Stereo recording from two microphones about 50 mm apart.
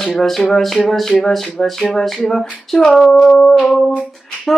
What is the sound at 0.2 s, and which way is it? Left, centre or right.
Speech, centre.